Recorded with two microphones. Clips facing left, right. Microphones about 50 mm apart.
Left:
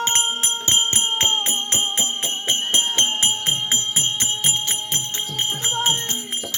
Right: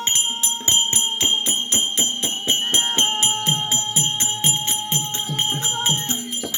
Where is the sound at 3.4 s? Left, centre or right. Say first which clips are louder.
Right 1 dB; left.